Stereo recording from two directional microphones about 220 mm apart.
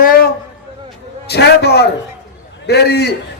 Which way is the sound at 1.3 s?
50° left (ahead or behind).